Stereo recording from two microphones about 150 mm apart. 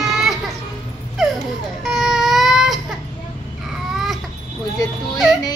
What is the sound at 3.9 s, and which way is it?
Baby cry, centre (ahead or behind).